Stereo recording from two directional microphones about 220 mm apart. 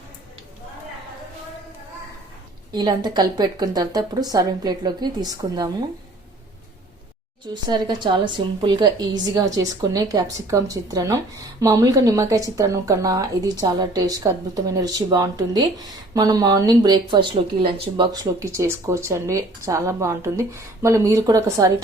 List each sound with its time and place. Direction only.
2.7 s speech: 20° right (ahead or behind)
7.4 s speech: 20° right (ahead or behind)